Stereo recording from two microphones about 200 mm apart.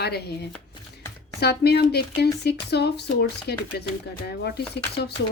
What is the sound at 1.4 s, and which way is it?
A woman's voice, 55° left (ahead or behind).